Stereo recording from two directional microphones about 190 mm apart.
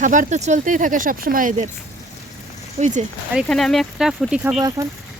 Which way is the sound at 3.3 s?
Centre (ahead or behind).